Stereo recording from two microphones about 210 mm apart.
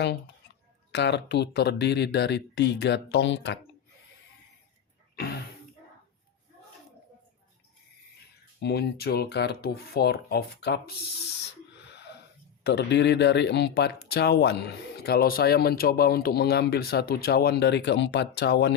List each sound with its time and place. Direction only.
0.9 s speech: 55° left (ahead or behind)
5.1 s a sound: 45° left (ahead or behind)
8.6 s speech: 50° left (ahead or behind)
11.9 s wheeze: 55° left (ahead or behind)
12.6 s speech: 55° left (ahead or behind)